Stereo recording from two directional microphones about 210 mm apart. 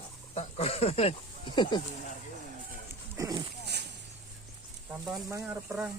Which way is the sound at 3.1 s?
20° right (ahead or behind).